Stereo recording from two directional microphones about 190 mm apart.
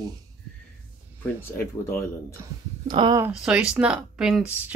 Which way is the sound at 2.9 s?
25° right (ahead or behind).